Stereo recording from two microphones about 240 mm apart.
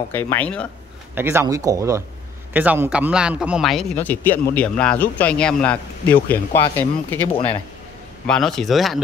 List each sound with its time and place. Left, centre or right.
0.1 s speech: centre
1.1 s a man's voice: centre
7.3 s speech: left
8.3 s a man's voice: centre